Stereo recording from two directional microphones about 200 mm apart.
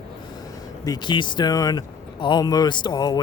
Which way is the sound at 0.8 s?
20° left (ahead or behind).